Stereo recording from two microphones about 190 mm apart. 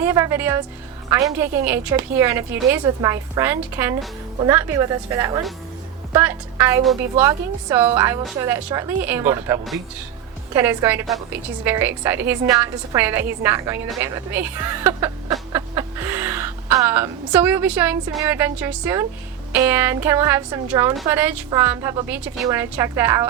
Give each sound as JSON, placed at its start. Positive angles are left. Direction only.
{"t": 0.0, "sound": "a woman's voice", "side_deg": -15}